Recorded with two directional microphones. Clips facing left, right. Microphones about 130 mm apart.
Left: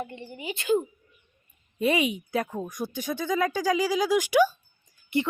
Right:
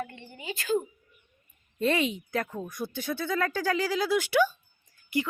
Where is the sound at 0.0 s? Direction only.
20° left (ahead or behind).